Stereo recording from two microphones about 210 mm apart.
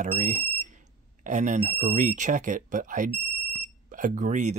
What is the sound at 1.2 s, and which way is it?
Speech, 35° right (ahead or behind).